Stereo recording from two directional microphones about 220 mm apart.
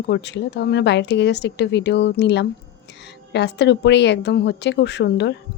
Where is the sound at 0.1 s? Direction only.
50° left (ahead or behind).